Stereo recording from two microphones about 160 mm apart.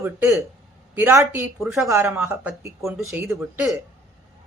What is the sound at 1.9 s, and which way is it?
Speech, 15° right (ahead or behind).